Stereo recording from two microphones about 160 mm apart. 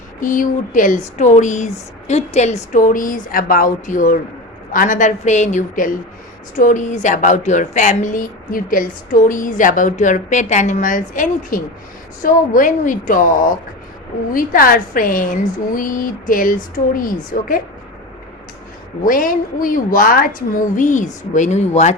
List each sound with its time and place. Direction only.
0.2 s a woman's voice: 55° left (ahead or behind)
19.0 s a woman's voice: 60° left (ahead or behind)